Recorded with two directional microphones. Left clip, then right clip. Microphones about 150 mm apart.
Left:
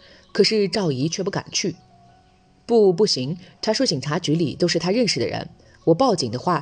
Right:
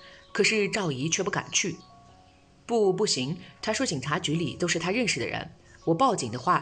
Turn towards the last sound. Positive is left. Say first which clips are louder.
# left 4 dB
turn(degrees=40)  # may be behind; listen again after turning